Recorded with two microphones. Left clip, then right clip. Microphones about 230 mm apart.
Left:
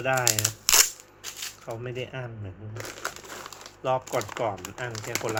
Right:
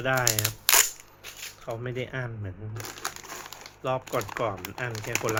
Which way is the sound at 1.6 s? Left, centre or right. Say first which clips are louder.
Right 3 dB; centre.